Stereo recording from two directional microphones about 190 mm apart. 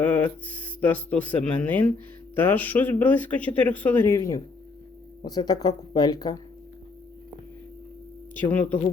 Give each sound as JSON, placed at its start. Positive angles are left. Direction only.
{"t": 0.0, "sound": "speech", "side_deg": 5}
{"t": 8.4, "sound": "speech", "side_deg": 10}